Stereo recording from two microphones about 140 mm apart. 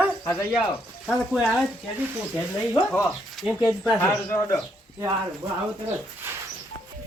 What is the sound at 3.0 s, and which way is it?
Speech, centre (ahead or behind).